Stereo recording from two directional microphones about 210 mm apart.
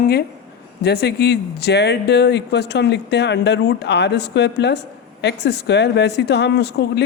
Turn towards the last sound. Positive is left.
turn(degrees=50)  # may be behind; listen again after turning